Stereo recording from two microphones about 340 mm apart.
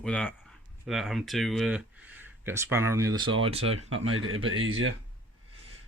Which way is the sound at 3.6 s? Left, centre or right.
Right.